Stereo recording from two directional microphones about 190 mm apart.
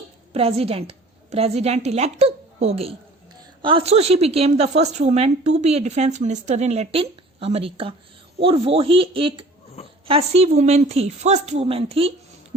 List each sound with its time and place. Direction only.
0.3 s a woman's voice: 30° right (ahead or behind)